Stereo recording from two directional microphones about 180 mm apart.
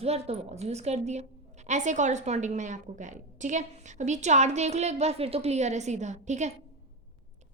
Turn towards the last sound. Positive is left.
turn(degrees=-40)  # may be behind; listen again after turning